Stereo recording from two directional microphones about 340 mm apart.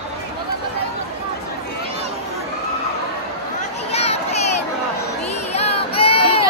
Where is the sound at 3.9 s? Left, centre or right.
Centre.